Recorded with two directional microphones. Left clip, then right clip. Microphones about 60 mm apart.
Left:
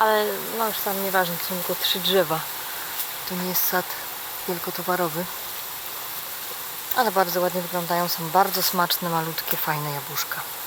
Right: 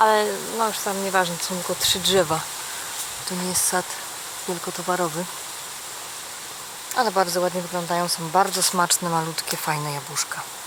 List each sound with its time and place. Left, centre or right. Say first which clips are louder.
0.0 s speech: right 2 dB; right
3.2 s speech: right 2 dB; centre
6.9 s speech: even; centre
9.3 s speech: right 1 dB; centre